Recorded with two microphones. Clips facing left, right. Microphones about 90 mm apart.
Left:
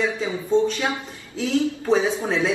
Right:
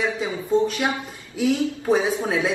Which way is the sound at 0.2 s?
15° right (ahead or behind).